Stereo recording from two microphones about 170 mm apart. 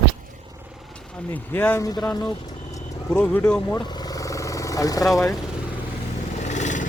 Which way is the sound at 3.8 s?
25° left (ahead or behind).